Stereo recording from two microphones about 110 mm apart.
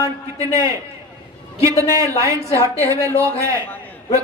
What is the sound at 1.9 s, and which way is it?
A man's voice, 25° right (ahead or behind).